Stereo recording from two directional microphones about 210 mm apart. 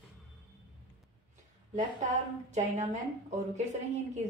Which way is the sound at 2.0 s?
35° right (ahead or behind).